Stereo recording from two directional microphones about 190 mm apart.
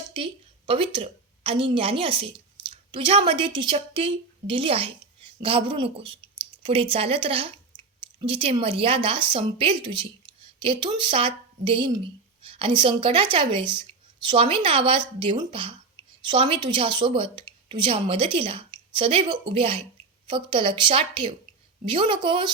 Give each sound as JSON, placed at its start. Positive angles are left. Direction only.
{"t": 0.7, "sound": "a woman's voice", "side_deg": -30}